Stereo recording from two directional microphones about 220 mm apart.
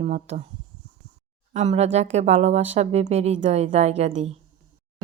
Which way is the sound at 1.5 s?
30° right (ahead or behind).